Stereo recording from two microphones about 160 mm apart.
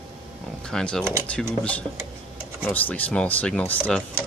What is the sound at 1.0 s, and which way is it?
Speech, 15° right (ahead or behind).